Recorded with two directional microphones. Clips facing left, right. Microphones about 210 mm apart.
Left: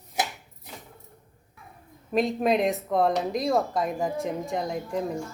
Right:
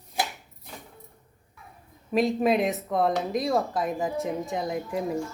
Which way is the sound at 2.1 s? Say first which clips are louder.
Right 1 dB; centre (ahead or behind).